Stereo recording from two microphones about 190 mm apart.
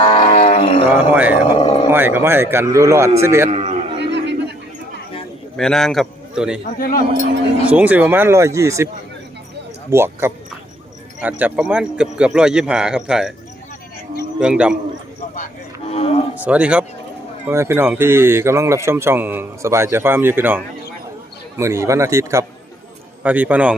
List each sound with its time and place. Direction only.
0.0 s music: 30° left (ahead or behind)
1.1 s speech: 10° right (ahead or behind)
1.5 s a sound: 30° left (ahead or behind)
1.9 s speech: 10° right (ahead or behind)
3.5 s a sound: 40° right (ahead or behind)
3.9 s a sound: 65° right (ahead or behind)
5.5 s a man's voice: centre (ahead or behind)
6.7 s a man's voice: 50° left (ahead or behind)
7.7 s speech: 10° right (ahead or behind)
9.9 s speech: 15° right (ahead or behind)
14.3 s speech: 5° right (ahead or behind)
15.9 s speech: 30° left (ahead or behind)
16.3 s speech: 10° right (ahead or behind)
21.6 s speech: 15° right (ahead or behind)